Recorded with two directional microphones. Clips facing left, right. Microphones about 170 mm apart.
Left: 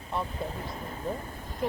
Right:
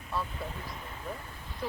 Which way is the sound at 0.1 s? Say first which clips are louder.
Left 3 dB; 25° left (ahead or behind).